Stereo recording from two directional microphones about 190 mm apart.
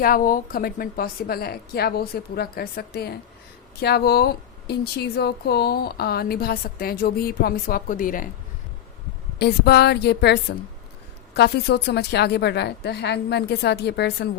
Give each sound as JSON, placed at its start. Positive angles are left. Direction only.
{"t": 0.0, "sound": "a woman's voice", "side_deg": 50}
{"t": 9.4, "sound": "a woman's voice", "side_deg": 60}